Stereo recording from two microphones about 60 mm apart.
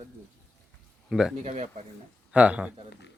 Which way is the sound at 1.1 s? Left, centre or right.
Centre.